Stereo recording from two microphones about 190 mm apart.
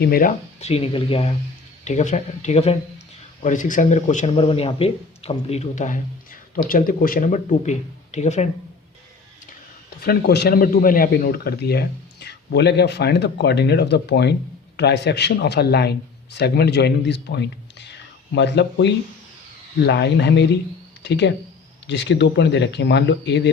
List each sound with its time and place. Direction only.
0.0 s speech: 50° left (ahead or behind)
10.0 s speech: 55° left (ahead or behind)